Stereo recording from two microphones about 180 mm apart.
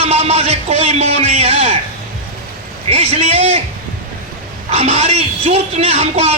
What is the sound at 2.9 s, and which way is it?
Speech, 35° right (ahead or behind).